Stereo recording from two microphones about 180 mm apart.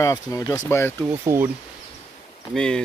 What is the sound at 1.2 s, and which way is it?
Speech, 15° right (ahead or behind).